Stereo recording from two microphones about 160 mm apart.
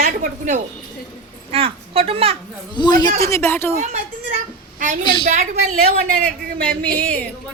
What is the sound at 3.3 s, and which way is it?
Speech, 15° left (ahead or behind).